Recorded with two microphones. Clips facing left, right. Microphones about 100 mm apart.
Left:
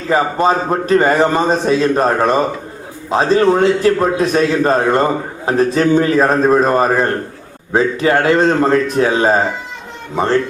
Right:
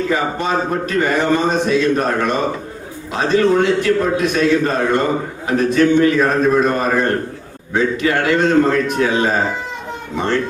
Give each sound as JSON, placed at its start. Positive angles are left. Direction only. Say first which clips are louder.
{"t": 0.1, "sound": "speech", "louder": "left 5 dB", "side_deg": 35}